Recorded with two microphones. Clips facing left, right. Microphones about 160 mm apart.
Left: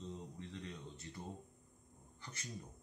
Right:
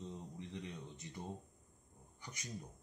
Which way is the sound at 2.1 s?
15° right (ahead or behind).